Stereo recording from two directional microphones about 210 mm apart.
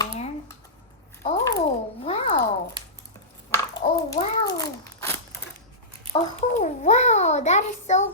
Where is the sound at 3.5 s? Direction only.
15° left (ahead or behind).